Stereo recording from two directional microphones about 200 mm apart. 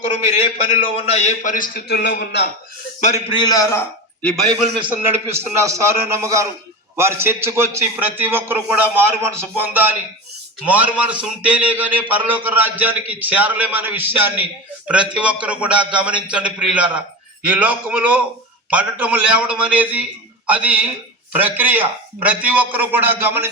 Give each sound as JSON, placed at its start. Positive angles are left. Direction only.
{"t": 0.7, "sound": "a man's voice", "side_deg": 30}
{"t": 3.0, "sound": "a man's voice", "side_deg": 35}
{"t": 3.3, "sound": "a man's voice", "side_deg": 20}
{"t": 4.9, "sound": "a man's voice", "side_deg": -10}